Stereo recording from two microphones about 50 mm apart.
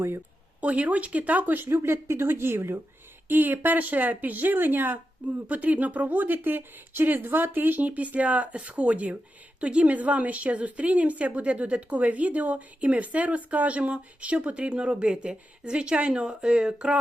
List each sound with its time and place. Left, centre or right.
0.6 s speech: right
3.2 s speech: right
5.5 s a woman's voice: right